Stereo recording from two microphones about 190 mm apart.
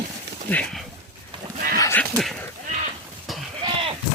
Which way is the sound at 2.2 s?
Centre (ahead or behind).